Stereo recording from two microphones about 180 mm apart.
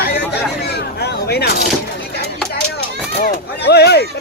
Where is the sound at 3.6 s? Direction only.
65° left (ahead or behind).